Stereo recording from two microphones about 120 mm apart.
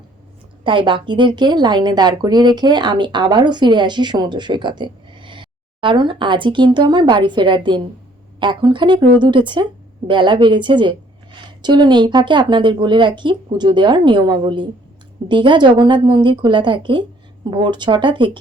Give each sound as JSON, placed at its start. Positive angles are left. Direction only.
{"t": 0.6, "sound": "a woman's voice", "side_deg": -45}